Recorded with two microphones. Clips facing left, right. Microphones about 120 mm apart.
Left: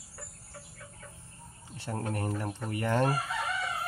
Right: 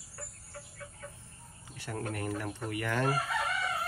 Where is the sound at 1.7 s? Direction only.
30° left (ahead or behind).